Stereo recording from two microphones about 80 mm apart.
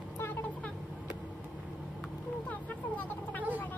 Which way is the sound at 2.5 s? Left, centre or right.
Centre.